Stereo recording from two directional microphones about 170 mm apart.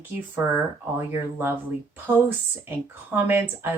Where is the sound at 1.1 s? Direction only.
15° right (ahead or behind).